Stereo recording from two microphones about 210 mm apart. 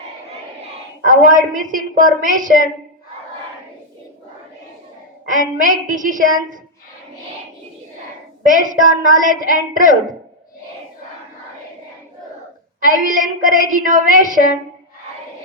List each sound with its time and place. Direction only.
1.2 s a woman's voice: 40° right (ahead or behind)
5.2 s a woman's voice: 40° right (ahead or behind)
8.4 s a woman's voice: 40° right (ahead or behind)
12.9 s a woman's voice: 40° right (ahead or behind)